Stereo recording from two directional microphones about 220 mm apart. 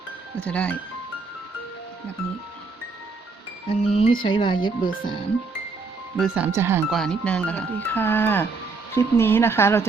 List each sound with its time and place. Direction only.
0.3 s speech: 5° left (ahead or behind)
3.8 s speech: 25° left (ahead or behind)
6.1 s speech: 5° right (ahead or behind)
6.9 s speech: 5° left (ahead or behind)